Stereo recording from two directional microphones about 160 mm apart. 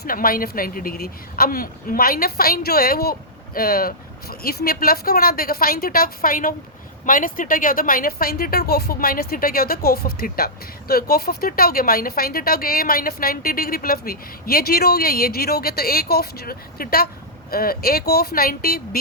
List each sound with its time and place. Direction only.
0.0 s a woman's voice: 65° left (ahead or behind)